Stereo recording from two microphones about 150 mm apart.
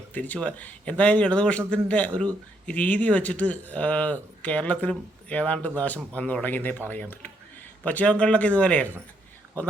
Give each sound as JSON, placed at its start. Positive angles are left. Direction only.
{"t": 0.1, "sound": "speech", "side_deg": 10}